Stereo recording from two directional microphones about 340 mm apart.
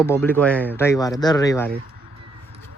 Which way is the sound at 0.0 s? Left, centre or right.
Centre.